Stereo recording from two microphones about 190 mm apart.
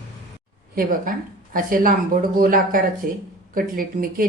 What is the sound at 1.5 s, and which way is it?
A woman's voice, 45° right (ahead or behind).